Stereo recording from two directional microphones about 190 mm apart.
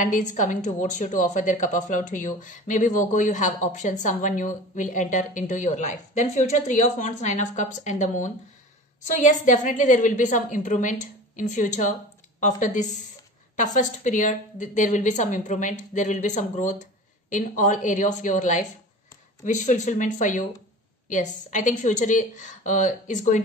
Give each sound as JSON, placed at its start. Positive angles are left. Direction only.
{"t": 0.0, "sound": "a woman's voice", "side_deg": 40}